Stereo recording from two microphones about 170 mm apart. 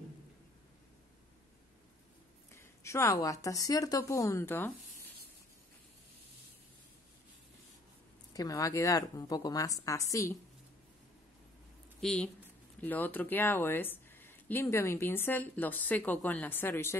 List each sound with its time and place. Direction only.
2.5 s speech: 15° left (ahead or behind)
8.3 s speech: 20° left (ahead or behind)
12.0 s speech: 5° left (ahead or behind)